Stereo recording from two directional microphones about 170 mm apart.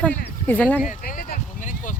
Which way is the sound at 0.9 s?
55° left (ahead or behind).